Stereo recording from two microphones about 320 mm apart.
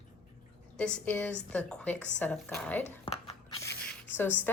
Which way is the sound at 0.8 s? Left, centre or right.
Centre.